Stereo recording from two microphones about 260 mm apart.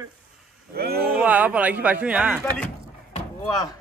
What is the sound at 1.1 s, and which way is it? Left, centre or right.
A man's voice, centre.